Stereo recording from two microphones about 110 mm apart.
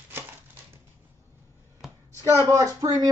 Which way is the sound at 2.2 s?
30° right (ahead or behind).